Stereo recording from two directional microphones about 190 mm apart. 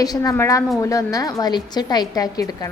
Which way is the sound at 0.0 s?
20° left (ahead or behind).